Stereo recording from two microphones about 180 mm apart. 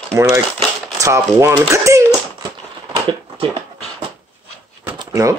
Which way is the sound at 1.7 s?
15° right (ahead or behind).